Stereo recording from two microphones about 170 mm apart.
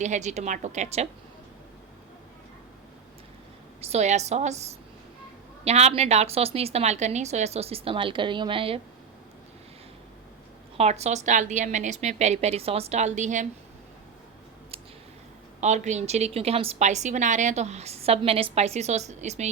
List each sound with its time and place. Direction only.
0.0 s a woman's voice: 45° right (ahead or behind)
3.8 s a woman's voice: 40° right (ahead or behind)
5.6 s a woman's voice: 40° right (ahead or behind)
10.8 s a woman's voice: 40° right (ahead or behind)
15.6 s a woman's voice: 45° right (ahead or behind)